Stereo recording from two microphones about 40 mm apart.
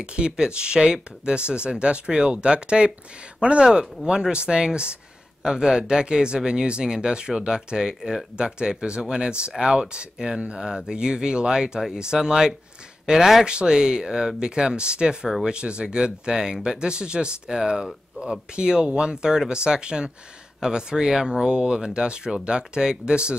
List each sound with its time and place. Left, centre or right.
0.0 s speech: right